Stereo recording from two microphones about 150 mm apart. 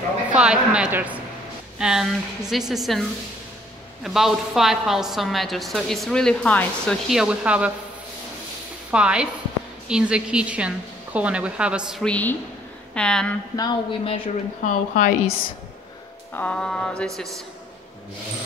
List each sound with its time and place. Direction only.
0.3 s a woman's voice: 5° right (ahead or behind); by 7.0 s 10° left (ahead or behind)
7.1 s a woman's voice: 5° right (ahead or behind)
8.9 s a woman's voice: 5° right (ahead or behind)
12.0 s a woman's voice: 10° left (ahead or behind)
13.6 s a woman's voice: 30° left (ahead or behind)
14.6 s a woman's voice: 60° left (ahead or behind)
16.3 s a woman's voice: 5° left (ahead or behind)